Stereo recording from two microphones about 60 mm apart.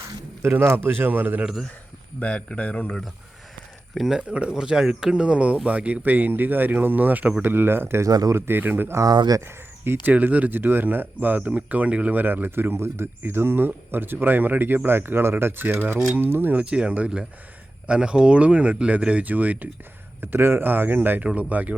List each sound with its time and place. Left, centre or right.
0.6 s speech: right
2.1 s speech: centre
3.9 s speech: centre
4.2 s speech: centre
7.4 s speech: right
8.0 s speech: right
8.3 s speech: right
9.0 s speech: right
9.4 s speech: right
10.1 s speech: right
16.6 s speech: centre
20.2 s speech: right